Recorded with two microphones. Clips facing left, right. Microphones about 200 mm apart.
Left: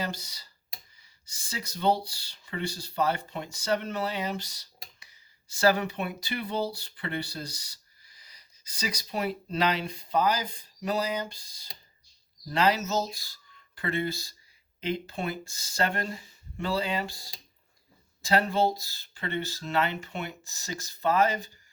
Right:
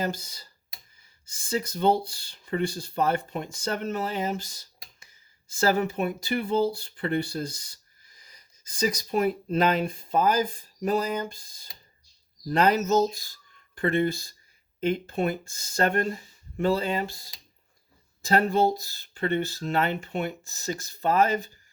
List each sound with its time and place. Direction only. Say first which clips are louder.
0.0 s speech: right 4 dB; 50° right (ahead or behind)
19.1 s speech: right 6 dB; 45° right (ahead or behind)